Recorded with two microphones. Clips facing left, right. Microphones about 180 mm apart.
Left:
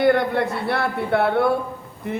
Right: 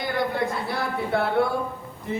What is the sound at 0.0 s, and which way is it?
A man's voice, 65° left (ahead or behind).